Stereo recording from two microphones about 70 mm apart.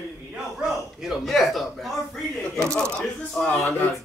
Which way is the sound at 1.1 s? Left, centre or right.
Centre.